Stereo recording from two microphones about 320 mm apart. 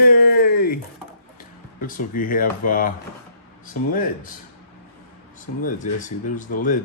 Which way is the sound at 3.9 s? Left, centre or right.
Left.